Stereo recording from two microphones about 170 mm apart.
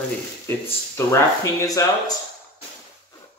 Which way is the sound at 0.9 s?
20° left (ahead or behind).